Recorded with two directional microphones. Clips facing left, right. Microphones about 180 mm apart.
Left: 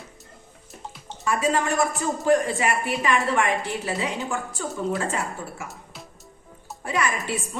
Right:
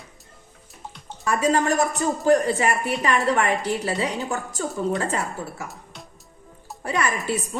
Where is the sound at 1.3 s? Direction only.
40° right (ahead or behind).